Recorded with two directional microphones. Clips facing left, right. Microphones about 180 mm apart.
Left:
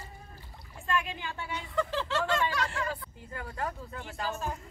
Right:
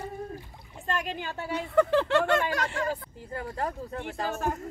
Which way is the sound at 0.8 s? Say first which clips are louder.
Right 1 dB; 40° right (ahead or behind).